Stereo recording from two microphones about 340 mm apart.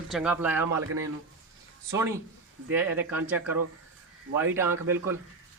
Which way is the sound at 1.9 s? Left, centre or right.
Centre.